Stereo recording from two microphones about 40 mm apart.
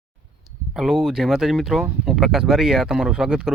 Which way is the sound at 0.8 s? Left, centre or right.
Centre.